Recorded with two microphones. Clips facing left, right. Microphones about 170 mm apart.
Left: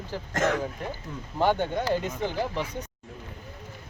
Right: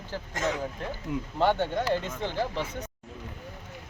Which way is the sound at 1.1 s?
10° right (ahead or behind).